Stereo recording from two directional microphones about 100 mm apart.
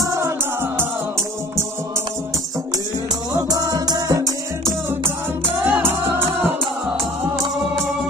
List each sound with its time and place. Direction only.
0.0 s music: 30° right (ahead or behind)
3.3 s music: 40° right (ahead or behind)
5.6 s music: 20° right (ahead or behind)